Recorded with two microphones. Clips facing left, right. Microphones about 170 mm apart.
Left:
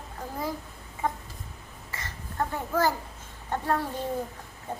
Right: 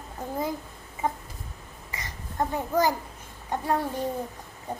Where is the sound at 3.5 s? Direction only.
15° right (ahead or behind).